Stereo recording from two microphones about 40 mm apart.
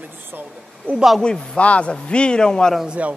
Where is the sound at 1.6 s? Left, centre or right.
Left.